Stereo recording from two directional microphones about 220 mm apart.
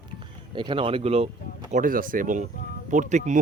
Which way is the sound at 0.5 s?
20° right (ahead or behind).